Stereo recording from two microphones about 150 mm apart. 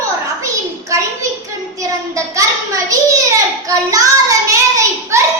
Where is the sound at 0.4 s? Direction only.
20° right (ahead or behind).